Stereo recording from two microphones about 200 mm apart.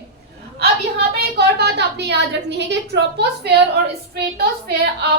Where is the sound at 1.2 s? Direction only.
55° right (ahead or behind).